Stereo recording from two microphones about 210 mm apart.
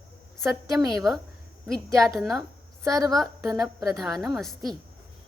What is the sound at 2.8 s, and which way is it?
Speech, 15° right (ahead or behind).